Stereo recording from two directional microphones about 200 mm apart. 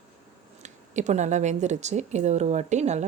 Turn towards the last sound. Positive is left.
turn(degrees=-35)  # may be behind; listen again after turning